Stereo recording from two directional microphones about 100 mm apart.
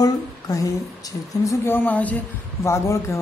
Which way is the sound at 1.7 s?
15° left (ahead or behind).